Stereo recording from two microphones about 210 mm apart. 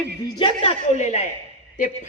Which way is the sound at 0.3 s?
25° left (ahead or behind).